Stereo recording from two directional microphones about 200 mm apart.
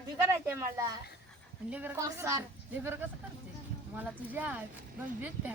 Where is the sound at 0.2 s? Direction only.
15° right (ahead or behind).